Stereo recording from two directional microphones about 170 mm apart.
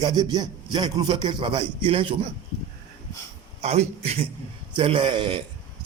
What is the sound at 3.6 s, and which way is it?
A man's voice, 40° right (ahead or behind).